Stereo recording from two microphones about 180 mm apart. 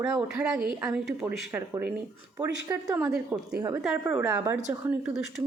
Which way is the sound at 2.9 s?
5° right (ahead or behind).